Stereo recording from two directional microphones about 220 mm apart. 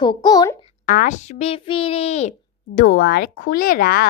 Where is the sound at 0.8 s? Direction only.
40° left (ahead or behind).